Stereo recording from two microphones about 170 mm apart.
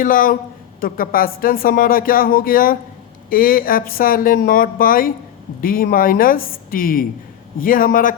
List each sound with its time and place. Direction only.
0.0 s speech: 55° left (ahead or behind)